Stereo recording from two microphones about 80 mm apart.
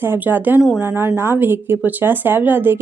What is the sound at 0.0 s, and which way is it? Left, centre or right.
Speech, right.